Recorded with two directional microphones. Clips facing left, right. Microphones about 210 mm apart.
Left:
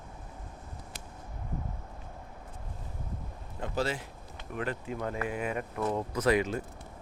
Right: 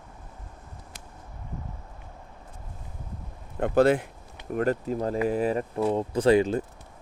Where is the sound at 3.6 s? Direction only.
55° right (ahead or behind).